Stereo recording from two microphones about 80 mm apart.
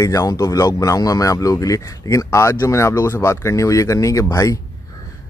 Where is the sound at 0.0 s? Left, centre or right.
Left.